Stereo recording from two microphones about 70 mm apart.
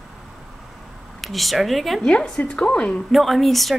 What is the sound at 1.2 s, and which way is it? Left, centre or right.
Speech, centre.